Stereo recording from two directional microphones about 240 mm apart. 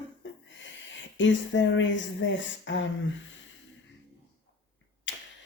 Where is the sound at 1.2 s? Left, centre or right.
Left.